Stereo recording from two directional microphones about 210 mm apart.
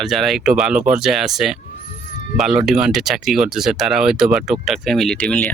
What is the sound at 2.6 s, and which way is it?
Speech, centre (ahead or behind).